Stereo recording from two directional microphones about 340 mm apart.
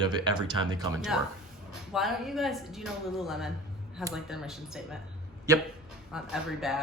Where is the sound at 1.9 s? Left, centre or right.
Centre.